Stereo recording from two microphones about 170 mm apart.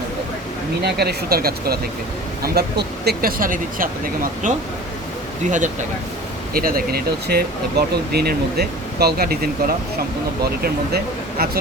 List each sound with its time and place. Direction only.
0.9 s speech: 65° right (ahead or behind); by 5.7 s 45° right (ahead or behind)
6.5 s speech: 60° right (ahead or behind)